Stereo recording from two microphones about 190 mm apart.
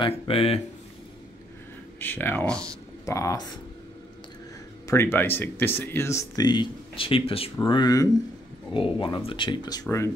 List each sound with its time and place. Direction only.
0.0 s speech: 30° left (ahead or behind)
2.0 s speech: 10° left (ahead or behind)
4.8 s speech: 10° left (ahead or behind)